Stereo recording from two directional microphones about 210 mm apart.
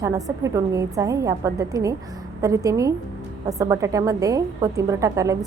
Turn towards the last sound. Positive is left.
turn(degrees=-15)  # may be behind; listen again after turning